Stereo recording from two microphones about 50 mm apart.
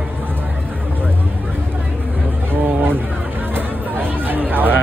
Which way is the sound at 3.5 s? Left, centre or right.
Right.